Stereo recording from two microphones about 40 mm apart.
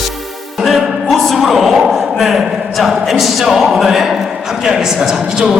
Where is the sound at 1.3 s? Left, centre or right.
Centre.